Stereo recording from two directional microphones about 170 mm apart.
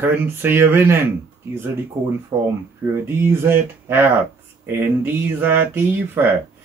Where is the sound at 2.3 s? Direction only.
20° right (ahead or behind).